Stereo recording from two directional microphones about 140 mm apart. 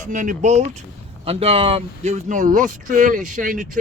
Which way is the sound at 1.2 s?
45° right (ahead or behind).